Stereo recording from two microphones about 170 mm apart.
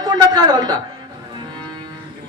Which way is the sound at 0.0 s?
25° right (ahead or behind).